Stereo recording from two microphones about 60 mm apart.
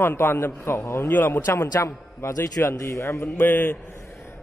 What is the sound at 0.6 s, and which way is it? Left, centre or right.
Speech, left.